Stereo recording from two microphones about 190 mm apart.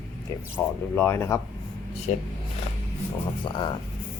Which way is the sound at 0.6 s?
10° left (ahead or behind).